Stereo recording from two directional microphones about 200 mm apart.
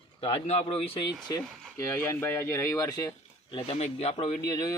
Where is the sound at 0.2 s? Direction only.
25° left (ahead or behind).